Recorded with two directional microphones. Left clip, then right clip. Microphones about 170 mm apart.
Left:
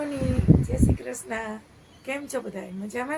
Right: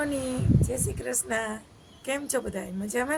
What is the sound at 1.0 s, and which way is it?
A woman's voice, 15° right (ahead or behind).